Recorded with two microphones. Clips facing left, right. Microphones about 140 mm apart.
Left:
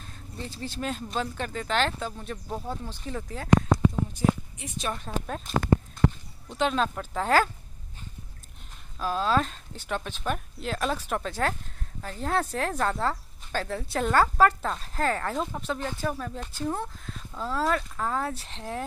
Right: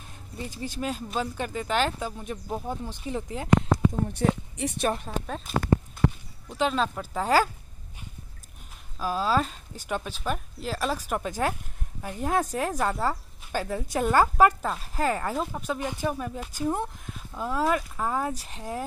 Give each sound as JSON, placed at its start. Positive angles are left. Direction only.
{"t": 0.4, "sound": "speech", "side_deg": -15}
{"t": 4.1, "sound": "speech", "side_deg": -65}
{"t": 5.0, "sound": "speech", "side_deg": 0}
{"t": 6.5, "sound": "speech", "side_deg": 0}
{"t": 8.9, "sound": "speech", "side_deg": -5}